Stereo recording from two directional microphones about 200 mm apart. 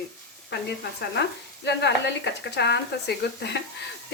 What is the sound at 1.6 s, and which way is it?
Sizzle, 60° left (ahead or behind).